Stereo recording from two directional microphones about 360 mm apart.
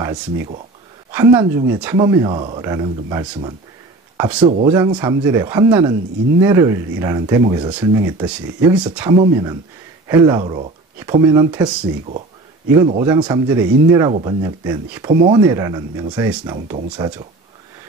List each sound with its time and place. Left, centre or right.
0.0 s speech: centre